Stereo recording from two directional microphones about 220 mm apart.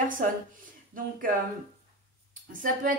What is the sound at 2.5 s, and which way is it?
Speech, 40° right (ahead or behind).